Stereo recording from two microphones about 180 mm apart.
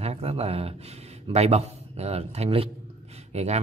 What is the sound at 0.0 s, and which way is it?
Speech, 35° right (ahead or behind).